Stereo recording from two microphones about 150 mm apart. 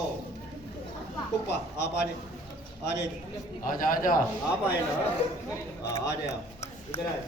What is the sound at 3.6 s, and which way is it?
Speech, 65° left (ahead or behind).